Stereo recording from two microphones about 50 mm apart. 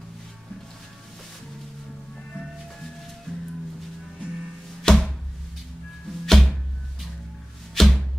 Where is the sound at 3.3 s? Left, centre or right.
Centre.